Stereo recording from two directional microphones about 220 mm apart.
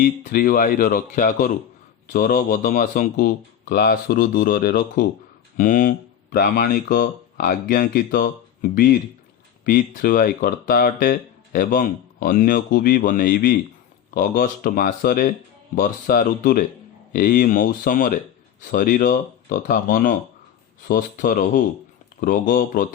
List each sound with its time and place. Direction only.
0.0 s speech: 40° left (ahead or behind)